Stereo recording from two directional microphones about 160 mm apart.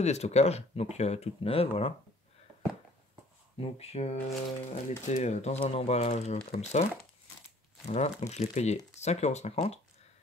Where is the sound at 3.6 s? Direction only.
40° left (ahead or behind).